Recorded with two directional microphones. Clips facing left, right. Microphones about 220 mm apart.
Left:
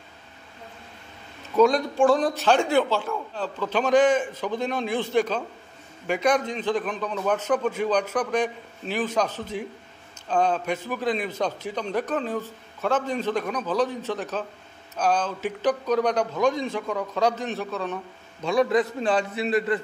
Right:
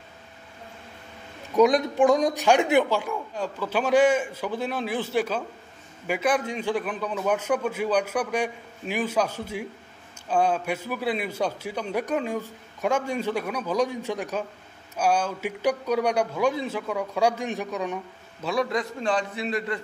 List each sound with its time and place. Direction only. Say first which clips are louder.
1.6 s a man's voice: even; 15° right (ahead or behind)
18.4 s a man's voice: left 5 dB; centre (ahead or behind)